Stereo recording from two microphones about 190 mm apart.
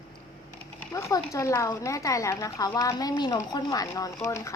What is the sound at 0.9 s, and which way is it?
Speech, 15° left (ahead or behind).